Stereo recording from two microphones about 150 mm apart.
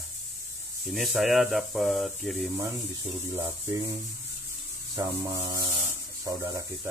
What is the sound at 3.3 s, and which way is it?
Speech, 25° right (ahead or behind).